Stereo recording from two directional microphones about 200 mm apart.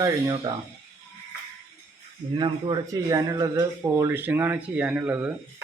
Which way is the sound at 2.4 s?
20° right (ahead or behind).